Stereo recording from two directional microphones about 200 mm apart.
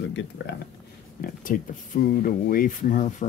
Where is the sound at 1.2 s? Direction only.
45° left (ahead or behind).